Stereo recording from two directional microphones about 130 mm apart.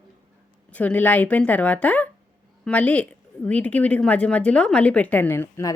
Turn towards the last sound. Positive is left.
turn(degrees=20)  # may be behind; listen again after turning